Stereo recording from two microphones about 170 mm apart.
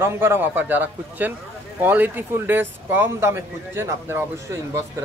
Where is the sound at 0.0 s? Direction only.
15° right (ahead or behind).